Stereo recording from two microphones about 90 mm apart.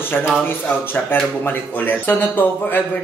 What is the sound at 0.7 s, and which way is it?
Speech, 20° left (ahead or behind).